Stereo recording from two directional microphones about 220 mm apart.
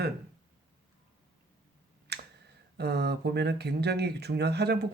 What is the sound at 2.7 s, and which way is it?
Speech, 50° right (ahead or behind).